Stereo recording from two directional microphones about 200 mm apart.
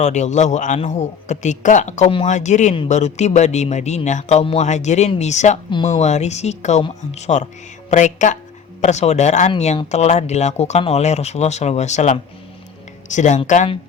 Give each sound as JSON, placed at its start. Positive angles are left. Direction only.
{"t": 0.0, "sound": "a man's voice", "side_deg": 35}